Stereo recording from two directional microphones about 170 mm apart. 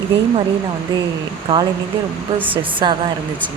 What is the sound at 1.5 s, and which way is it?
Speech, 30° right (ahead or behind).